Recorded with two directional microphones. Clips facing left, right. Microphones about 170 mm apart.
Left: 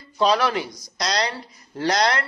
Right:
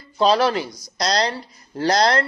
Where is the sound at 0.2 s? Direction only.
30° right (ahead or behind).